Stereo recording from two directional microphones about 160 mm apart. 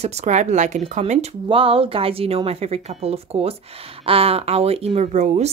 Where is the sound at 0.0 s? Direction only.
45° right (ahead or behind).